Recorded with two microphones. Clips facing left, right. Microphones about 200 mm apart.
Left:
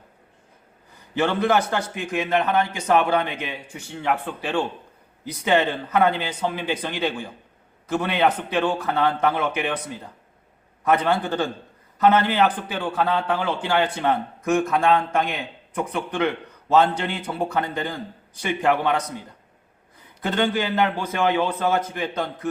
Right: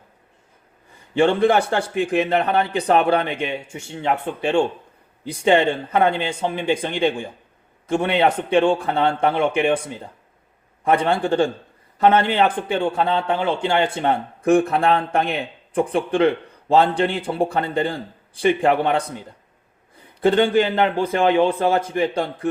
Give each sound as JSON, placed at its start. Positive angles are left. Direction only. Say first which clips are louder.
{"t": 1.2, "sound": "a man's voice", "louder": "right 4 dB", "side_deg": -30}
{"t": 10.8, "sound": "a man's voice", "louder": "right 2 dB", "side_deg": -30}
{"t": 11.3, "sound": "a man's voice", "louder": "right 6 dB", "side_deg": -15}
{"t": 11.9, "sound": "a man's voice", "louder": "right 2 dB", "side_deg": -30}
{"t": 14.4, "sound": "speech", "louder": "right 4 dB", "side_deg": -35}
{"t": 20.6, "sound": "a man's voice", "louder": "right 5 dB", "side_deg": -25}
{"t": 21.8, "sound": "a man's voice", "louder": "right 6 dB", "side_deg": -15}
{"t": 22.1, "sound": "speech", "louder": "right 4 dB", "side_deg": -30}